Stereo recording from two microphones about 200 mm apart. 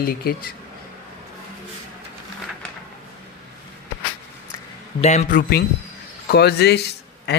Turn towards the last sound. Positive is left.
turn(degrees=55)  # may be behind; listen again after turning